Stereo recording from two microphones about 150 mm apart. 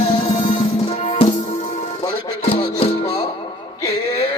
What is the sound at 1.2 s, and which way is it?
Music, 40° left (ahead or behind).